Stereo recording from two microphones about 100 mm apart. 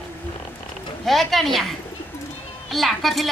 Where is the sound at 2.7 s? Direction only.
Centre (ahead or behind).